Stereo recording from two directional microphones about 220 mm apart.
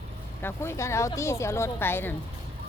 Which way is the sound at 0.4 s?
10° left (ahead or behind).